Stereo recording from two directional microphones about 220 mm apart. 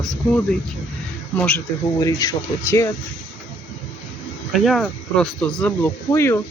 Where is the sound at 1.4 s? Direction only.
10° left (ahead or behind).